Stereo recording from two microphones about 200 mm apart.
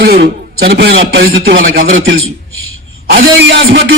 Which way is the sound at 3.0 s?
55° right (ahead or behind).